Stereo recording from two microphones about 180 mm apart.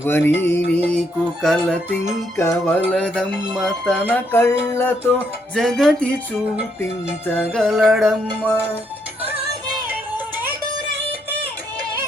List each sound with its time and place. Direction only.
0.0 s music: 10° left (ahead or behind)
2.3 s music: 15° left (ahead or behind)
4.1 s music: 10° left (ahead or behind)
5.5 s music: centre (ahead or behind)
7.3 s music: centre (ahead or behind)
8.4 s music: 10° left (ahead or behind)
9.9 s a sound: 10° right (ahead or behind)